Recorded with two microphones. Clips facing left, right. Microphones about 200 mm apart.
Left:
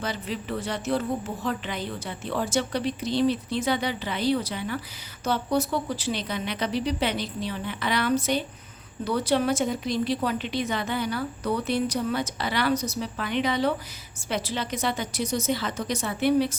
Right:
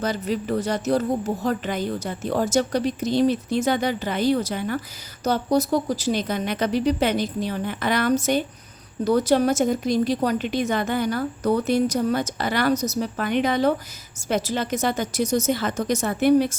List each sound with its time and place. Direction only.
0.0 s a woman's voice: 40° right (ahead or behind)